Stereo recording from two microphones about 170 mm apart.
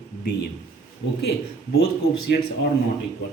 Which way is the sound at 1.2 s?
75° left (ahead or behind).